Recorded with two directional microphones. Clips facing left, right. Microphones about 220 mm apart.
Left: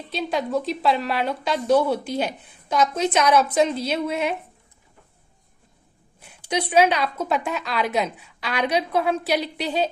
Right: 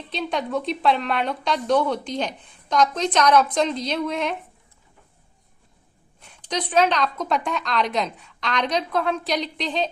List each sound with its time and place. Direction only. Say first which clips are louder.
0.1 s speech: left 1 dB; 5° left (ahead or behind)
6.1 s speech: left 2 dB; 5° left (ahead or behind)